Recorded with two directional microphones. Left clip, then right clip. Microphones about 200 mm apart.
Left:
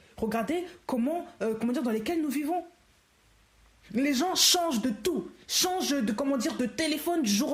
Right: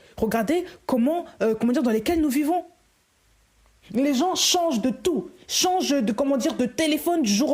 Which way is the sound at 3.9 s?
25° right (ahead or behind).